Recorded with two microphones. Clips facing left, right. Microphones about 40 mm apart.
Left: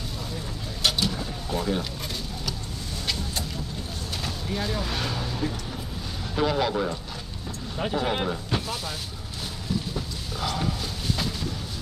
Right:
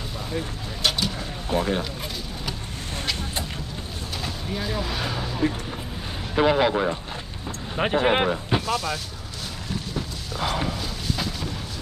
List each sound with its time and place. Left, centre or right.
0.8 s vehicle: centre
1.5 s speech: right
4.2 s speech: centre
6.3 s speech: right
7.7 s speech: right
8.6 s speech: centre
10.4 s a sound: right